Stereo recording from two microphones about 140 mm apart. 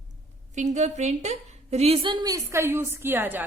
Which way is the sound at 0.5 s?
55° right (ahead or behind).